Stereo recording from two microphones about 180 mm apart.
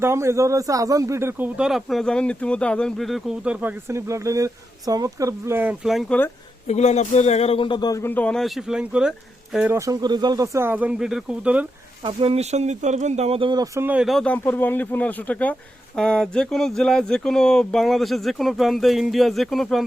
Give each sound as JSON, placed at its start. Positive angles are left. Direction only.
{"t": 0.0, "sound": "speech", "side_deg": -15}
{"t": 6.7, "sound": "speech", "side_deg": 40}
{"t": 9.7, "sound": "speech", "side_deg": -20}
{"t": 12.0, "sound": "speech", "side_deg": -35}
{"t": 13.8, "sound": "speech", "side_deg": -5}